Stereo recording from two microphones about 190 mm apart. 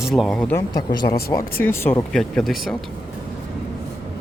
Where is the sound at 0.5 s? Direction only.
20° left (ahead or behind); by 2.7 s centre (ahead or behind).